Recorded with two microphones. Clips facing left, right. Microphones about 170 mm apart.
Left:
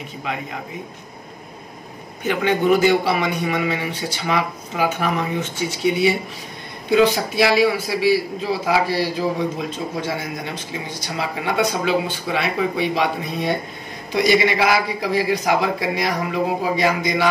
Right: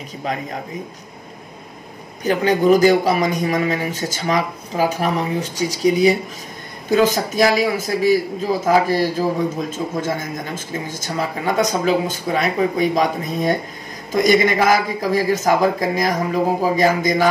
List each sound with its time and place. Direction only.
0.2 s a man's voice: 40° right (ahead or behind)
2.2 s a man's voice: 40° right (ahead or behind)